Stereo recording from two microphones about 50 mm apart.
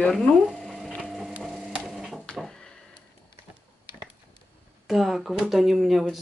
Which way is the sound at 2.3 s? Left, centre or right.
Left.